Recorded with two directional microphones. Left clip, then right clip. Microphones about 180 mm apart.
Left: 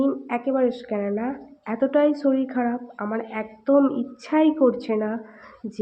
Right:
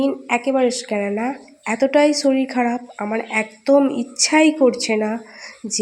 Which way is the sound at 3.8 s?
20° right (ahead or behind).